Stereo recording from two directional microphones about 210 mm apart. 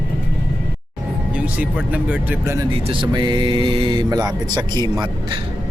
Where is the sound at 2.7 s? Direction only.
25° right (ahead or behind).